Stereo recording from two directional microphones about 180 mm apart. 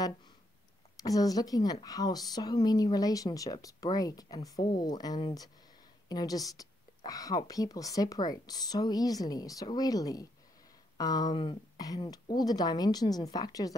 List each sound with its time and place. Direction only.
1.0 s a woman's voice: 20° left (ahead or behind)